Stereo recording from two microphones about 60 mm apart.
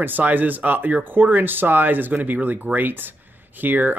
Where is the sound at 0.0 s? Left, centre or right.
Right.